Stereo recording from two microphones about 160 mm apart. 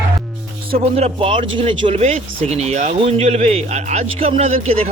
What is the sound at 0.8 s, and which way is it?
Speech, 40° right (ahead or behind).